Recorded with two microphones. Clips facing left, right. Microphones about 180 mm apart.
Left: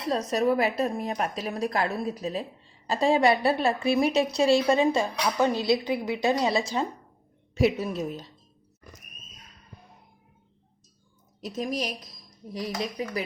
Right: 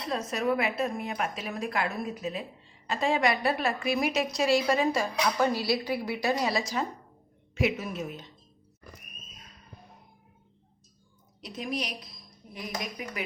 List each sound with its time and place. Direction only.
0.1 s a woman's voice: 35° left (ahead or behind)
11.3 s speech: 40° left (ahead or behind)